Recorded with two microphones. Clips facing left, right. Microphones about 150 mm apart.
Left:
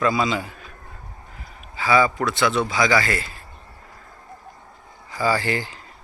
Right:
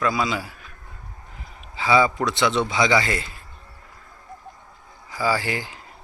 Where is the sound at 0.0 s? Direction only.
Centre (ahead or behind).